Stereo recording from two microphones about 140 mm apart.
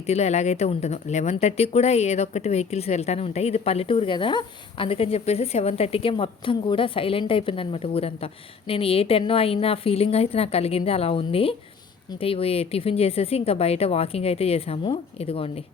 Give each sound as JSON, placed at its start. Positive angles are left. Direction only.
{"t": 0.0, "sound": "speech", "side_deg": 50}